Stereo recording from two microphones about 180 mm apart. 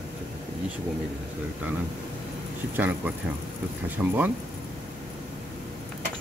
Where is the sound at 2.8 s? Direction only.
10° right (ahead or behind).